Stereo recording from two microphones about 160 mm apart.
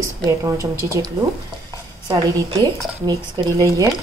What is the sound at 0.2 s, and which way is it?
Speech, 20° right (ahead or behind).